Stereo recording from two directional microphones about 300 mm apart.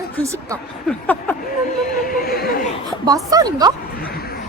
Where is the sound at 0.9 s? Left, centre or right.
Centre.